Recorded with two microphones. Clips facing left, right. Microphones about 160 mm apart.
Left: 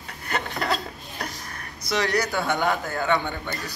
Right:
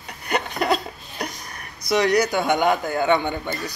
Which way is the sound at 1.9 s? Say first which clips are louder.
Right 6 dB; 15° right (ahead or behind).